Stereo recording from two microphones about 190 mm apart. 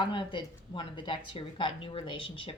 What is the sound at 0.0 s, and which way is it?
A woman's voice, 25° left (ahead or behind).